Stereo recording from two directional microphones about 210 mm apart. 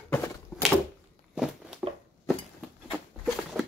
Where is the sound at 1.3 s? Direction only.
Centre (ahead or behind).